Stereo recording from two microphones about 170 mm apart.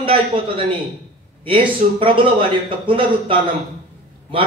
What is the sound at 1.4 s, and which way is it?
A man's voice, 30° right (ahead or behind).